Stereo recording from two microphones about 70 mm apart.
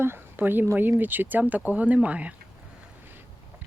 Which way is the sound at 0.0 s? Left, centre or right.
Right.